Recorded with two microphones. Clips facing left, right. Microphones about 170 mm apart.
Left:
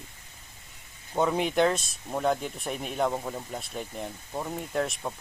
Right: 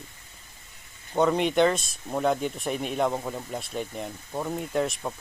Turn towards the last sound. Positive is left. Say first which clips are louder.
# right 2 dB
turn(degrees=0)  # may be behind; listen again after turning